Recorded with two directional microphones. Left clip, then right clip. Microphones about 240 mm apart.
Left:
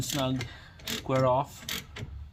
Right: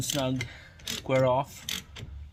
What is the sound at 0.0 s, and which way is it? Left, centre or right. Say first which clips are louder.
Speech: right 1 dB; right.